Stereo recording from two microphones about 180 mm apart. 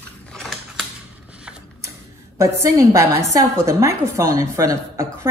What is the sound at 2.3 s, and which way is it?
A woman's voice, 15° right (ahead or behind).